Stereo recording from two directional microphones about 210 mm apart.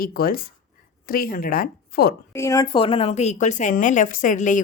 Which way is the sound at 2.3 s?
15° left (ahead or behind).